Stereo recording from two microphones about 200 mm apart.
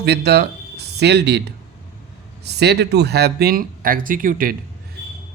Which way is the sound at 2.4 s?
55° right (ahead or behind).